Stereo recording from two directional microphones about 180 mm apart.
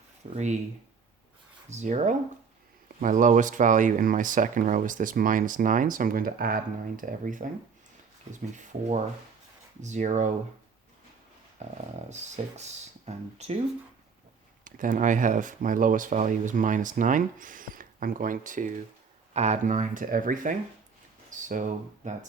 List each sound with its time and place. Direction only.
0.2 s speech: 40° right (ahead or behind)
1.7 s speech: 40° right (ahead or behind)
11.6 s speech: 40° right (ahead or behind)
14.6 s speech: 45° right (ahead or behind)